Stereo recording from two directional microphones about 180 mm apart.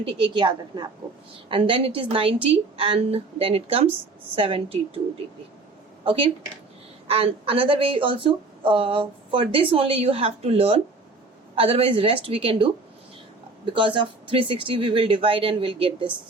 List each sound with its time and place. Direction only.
0.0 s a woman's voice: 25° right (ahead or behind)
6.1 s a woman's voice: 30° right (ahead or behind)